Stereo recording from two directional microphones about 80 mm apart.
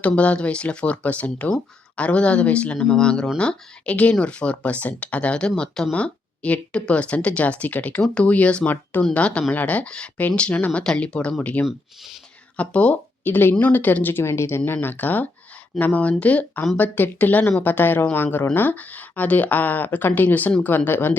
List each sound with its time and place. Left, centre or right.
0.0 s a woman's voice: centre
11.6 s speech: centre
12.5 s a woman's voice: centre